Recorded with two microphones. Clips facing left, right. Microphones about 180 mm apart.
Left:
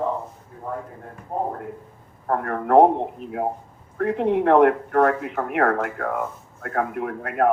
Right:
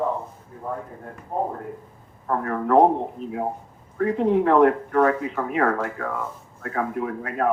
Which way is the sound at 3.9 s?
60° left (ahead or behind).